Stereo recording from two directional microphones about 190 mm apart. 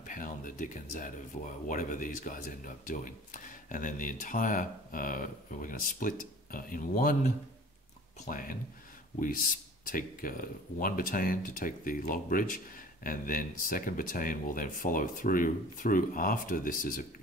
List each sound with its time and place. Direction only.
0.0 s speech: 45° left (ahead or behind)